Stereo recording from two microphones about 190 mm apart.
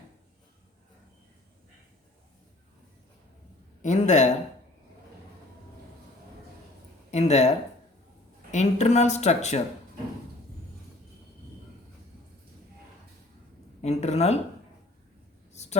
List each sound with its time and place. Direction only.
3.8 s a woman's voice: 40° left (ahead or behind)
7.1 s a woman's voice: 35° left (ahead or behind)
8.5 s a woman's voice: 35° left (ahead or behind)
13.8 s a woman's voice: 35° left (ahead or behind)
15.5 s a sound: 35° left (ahead or behind)